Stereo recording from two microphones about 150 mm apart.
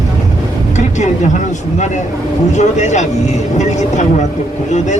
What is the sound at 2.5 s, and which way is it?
Speech, 50° left (ahead or behind).